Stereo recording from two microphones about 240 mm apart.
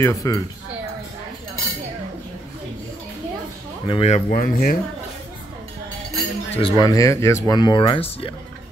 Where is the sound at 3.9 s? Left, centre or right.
Left.